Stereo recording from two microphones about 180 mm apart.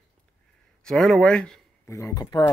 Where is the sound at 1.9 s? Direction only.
15° left (ahead or behind).